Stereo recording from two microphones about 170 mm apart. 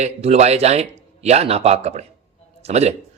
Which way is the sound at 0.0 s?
40° right (ahead or behind).